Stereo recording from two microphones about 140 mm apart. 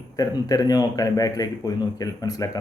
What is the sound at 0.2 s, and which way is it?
A man's voice, 25° left (ahead or behind).